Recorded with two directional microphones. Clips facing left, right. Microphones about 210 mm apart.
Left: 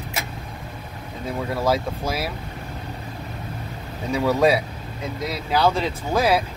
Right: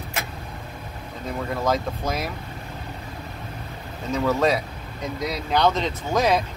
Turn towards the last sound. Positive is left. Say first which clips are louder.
# left 1 dB
turn(degrees=5)  # may be behind; listen again after turning